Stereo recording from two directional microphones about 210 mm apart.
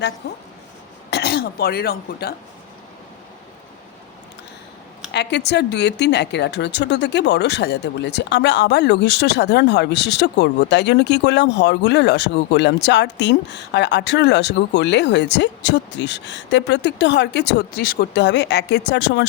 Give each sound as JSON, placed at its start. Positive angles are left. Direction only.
{"t": 1.1, "sound": "speech", "side_deg": 50}
{"t": 5.1, "sound": "speech", "side_deg": 55}